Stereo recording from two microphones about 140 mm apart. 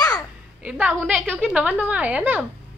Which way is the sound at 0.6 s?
10° right (ahead or behind).